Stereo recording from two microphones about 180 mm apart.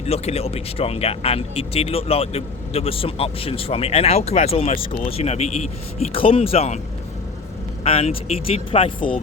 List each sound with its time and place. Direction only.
0.0 s speech: 35° left (ahead or behind)
7.9 s speech: 35° left (ahead or behind)